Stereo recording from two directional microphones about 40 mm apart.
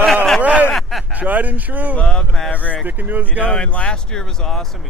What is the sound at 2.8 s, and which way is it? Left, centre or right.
Speech, right.